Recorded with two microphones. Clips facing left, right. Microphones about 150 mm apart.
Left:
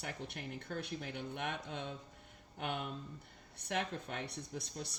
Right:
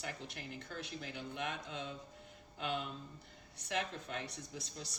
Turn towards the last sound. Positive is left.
turn(degrees=60)  # may be behind; listen again after turning